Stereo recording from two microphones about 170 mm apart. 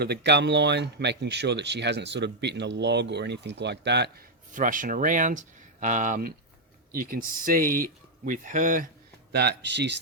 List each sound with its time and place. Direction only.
0.0 s speech: 80° right
4.5 s speech: 50° right (ahead or behind)
9.3 s speech: 75° right (ahead or behind)